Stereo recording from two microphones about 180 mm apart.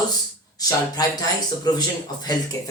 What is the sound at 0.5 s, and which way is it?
Speech, 20° left (ahead or behind).